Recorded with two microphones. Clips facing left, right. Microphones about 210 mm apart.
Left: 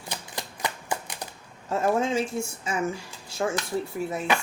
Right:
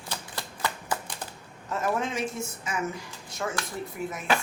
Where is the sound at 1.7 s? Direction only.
25° left (ahead or behind).